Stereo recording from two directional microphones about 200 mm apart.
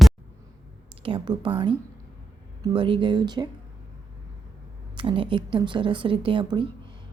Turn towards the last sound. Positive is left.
turn(degrees=-25)  # may be behind; listen again after turning